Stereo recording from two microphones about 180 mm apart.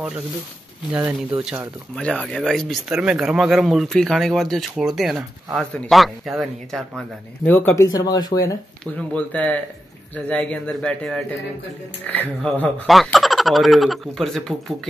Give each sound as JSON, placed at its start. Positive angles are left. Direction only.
{"t": 1.3, "sound": "speech", "side_deg": -5}
{"t": 9.1, "sound": "speech", "side_deg": 5}